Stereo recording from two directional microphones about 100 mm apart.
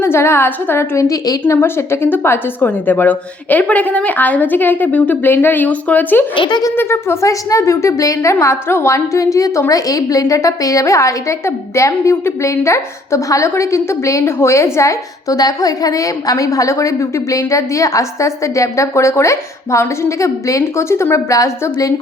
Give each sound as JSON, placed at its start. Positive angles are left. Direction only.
{"t": 0.0, "sound": "a woman's voice", "side_deg": 25}
{"t": 1.5, "sound": "a woman's voice", "side_deg": 25}
{"t": 6.3, "sound": "speech", "side_deg": 55}
{"t": 6.7, "sound": "a woman's voice", "side_deg": 25}